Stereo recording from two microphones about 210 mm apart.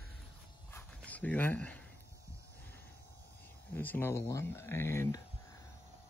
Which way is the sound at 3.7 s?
10° left (ahead or behind).